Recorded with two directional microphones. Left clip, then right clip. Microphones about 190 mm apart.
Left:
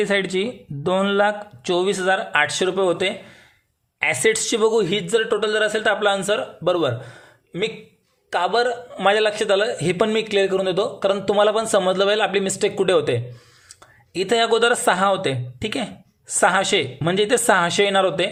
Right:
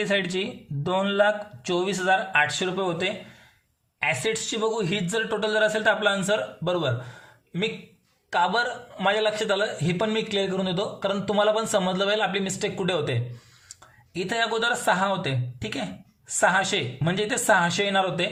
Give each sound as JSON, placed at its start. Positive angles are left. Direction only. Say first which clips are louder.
{"t": 0.0, "sound": "a man's voice", "louder": "left 5 dB", "side_deg": 20}
{"t": 8.3, "sound": "a man's voice", "louder": "left 4 dB", "side_deg": 25}